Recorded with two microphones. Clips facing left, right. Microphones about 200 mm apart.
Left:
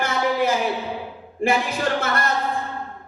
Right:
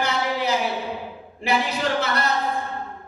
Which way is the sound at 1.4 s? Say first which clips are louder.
Left 2 dB; 50° left (ahead or behind).